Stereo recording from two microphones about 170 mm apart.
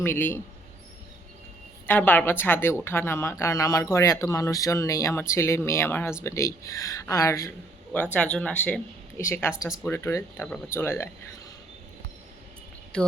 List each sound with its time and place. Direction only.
0.0 s speech: 15° left (ahead or behind)
1.9 s speech: 10° left (ahead or behind)
12.9 s speech: 5° left (ahead or behind)